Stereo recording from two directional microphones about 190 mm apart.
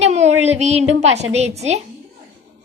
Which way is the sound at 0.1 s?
35° right (ahead or behind).